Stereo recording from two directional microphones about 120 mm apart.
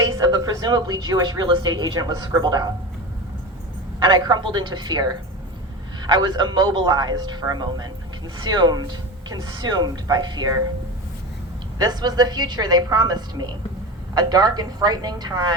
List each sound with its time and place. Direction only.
0.0 s speech: 35° right (ahead or behind)
4.0 s speech: 40° right (ahead or behind)
11.8 s speech: 35° right (ahead or behind)